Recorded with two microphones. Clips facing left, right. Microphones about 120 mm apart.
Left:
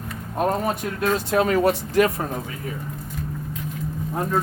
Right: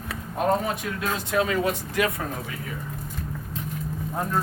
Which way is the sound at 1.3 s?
45° left (ahead or behind).